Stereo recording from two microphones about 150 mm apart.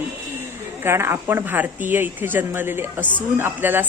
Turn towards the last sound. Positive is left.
turn(degrees=-15)  # may be behind; listen again after turning